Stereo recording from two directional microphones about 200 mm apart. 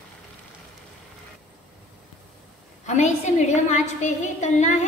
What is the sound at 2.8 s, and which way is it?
A woman's voice, 35° left (ahead or behind).